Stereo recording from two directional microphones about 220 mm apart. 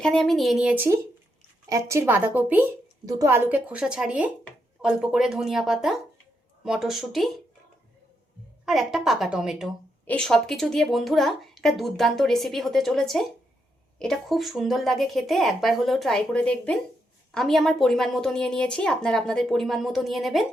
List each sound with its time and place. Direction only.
0.0 s a woman's voice: centre (ahead or behind)
8.6 s a woman's voice: centre (ahead or behind)